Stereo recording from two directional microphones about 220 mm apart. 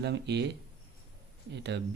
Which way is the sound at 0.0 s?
50° right (ahead or behind).